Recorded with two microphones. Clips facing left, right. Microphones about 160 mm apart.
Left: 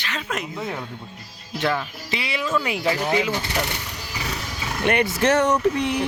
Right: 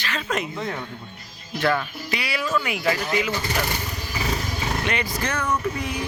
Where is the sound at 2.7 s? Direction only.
30° left (ahead or behind).